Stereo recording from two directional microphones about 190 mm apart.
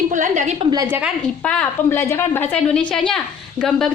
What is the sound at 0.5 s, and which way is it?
Speech, 20° right (ahead or behind).